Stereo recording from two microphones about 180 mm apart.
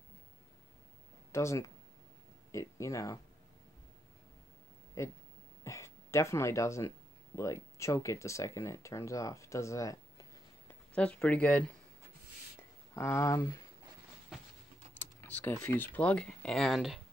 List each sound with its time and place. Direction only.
1.3 s speech: 15° left (ahead or behind)
5.0 s speech: 15° left (ahead or behind)
10.7 s speech: 5° left (ahead or behind)
12.9 s speech: 15° left (ahead or behind)
15.2 s speech: 10° left (ahead or behind)